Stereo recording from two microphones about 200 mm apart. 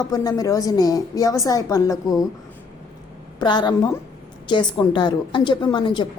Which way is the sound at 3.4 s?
20° left (ahead or behind).